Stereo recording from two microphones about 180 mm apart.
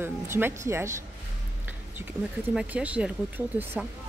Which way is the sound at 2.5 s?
5° right (ahead or behind).